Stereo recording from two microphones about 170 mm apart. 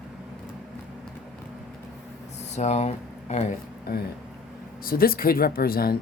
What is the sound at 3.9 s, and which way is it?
Speech, 60° left (ahead or behind).